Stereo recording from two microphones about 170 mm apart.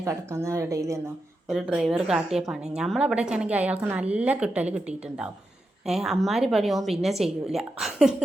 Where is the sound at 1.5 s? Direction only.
5° right (ahead or behind).